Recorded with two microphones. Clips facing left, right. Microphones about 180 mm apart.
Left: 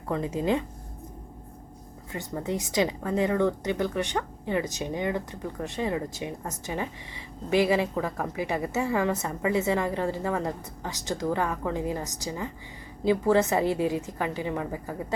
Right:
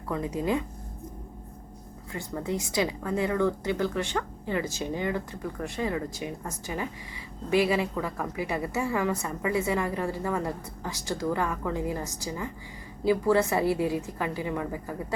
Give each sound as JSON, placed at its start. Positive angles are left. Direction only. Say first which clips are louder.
{"t": 0.1, "sound": "a woman's voice", "louder": "left 2 dB", "side_deg": 25}
{"t": 2.1, "sound": "a woman's voice", "louder": "left 1 dB", "side_deg": 20}